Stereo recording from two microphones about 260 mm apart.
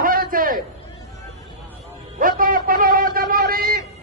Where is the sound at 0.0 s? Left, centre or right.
Right.